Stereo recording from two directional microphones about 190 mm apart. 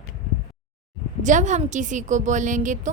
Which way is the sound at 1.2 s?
40° right (ahead or behind).